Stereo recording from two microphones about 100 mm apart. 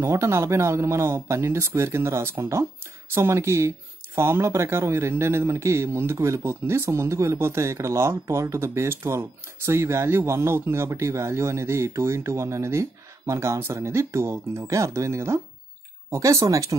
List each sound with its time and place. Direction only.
0.0 s speech: 25° right (ahead or behind)